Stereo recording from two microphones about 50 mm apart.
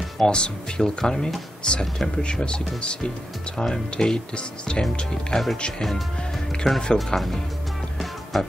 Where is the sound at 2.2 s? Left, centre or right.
Centre.